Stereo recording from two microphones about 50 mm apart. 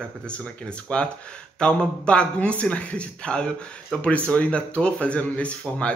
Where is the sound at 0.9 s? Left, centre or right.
Left.